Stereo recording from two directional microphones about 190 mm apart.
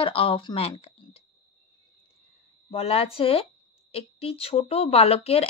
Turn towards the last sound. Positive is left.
turn(degrees=30)  # may be behind; listen again after turning